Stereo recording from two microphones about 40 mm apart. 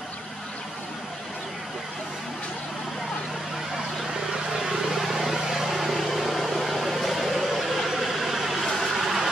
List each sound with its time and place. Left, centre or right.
4.1 s vehicle: centre